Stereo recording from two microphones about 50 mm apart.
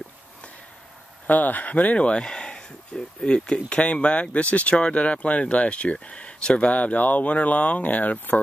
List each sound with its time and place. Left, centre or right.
1.2 s speech: left